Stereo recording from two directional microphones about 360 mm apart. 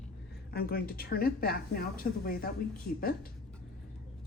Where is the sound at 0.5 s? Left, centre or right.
Left.